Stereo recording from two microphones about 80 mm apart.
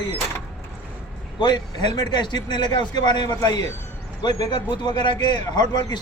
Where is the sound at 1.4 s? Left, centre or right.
Left.